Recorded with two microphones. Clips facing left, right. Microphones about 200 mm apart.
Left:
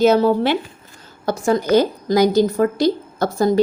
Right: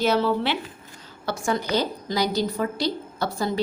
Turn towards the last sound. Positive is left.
turn(degrees=45)  # may be behind; listen again after turning